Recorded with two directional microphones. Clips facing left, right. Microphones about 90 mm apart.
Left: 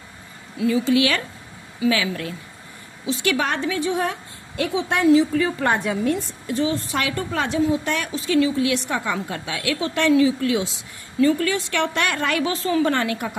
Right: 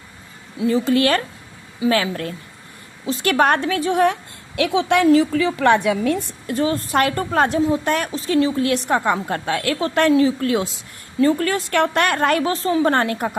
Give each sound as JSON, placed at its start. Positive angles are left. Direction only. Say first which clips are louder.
{"t": 0.7, "sound": "a woman's voice", "louder": "right 2 dB", "side_deg": -45}
{"t": 5.0, "sound": "a woman's voice", "louder": "left 2 dB", "side_deg": -55}
{"t": 5.4, "sound": "a woman's voice", "louder": "right 5 dB", "side_deg": -90}
{"t": 6.5, "sound": "a woman's voice", "louder": "right 3 dB", "side_deg": -50}